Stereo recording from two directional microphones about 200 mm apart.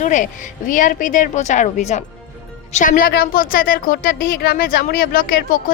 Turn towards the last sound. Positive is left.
turn(degrees=45)  # may be behind; listen again after turning